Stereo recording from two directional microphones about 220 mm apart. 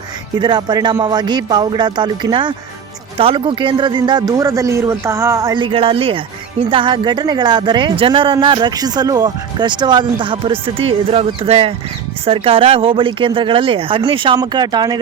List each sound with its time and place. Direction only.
0.3 s speech: 20° right (ahead or behind)